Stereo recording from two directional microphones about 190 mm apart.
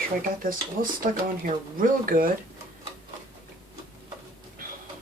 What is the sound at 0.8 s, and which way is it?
Speech, 45° right (ahead or behind).